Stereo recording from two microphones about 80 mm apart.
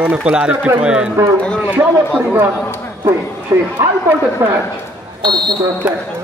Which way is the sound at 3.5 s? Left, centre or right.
Right.